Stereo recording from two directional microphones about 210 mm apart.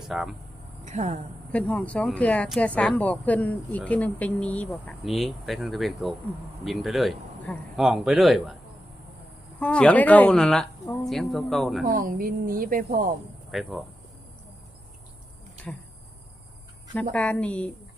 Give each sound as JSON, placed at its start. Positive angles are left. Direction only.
{"t": 0.0, "sound": "speech", "side_deg": 0}
{"t": 0.9, "sound": "speech", "side_deg": -35}
{"t": 1.5, "sound": "speech", "side_deg": 5}
{"t": 9.6, "sound": "speech", "side_deg": 5}
{"t": 11.9, "sound": "a woman's voice", "side_deg": -40}
{"t": 13.5, "sound": "speech", "side_deg": 0}
{"t": 16.9, "sound": "speech", "side_deg": 5}